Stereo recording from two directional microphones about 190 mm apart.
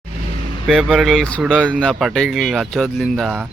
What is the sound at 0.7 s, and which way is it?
Speech, centre (ahead or behind).